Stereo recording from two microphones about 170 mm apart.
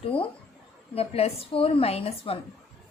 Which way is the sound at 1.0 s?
35° left (ahead or behind).